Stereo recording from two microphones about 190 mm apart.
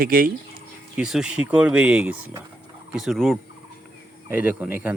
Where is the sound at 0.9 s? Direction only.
5° right (ahead or behind).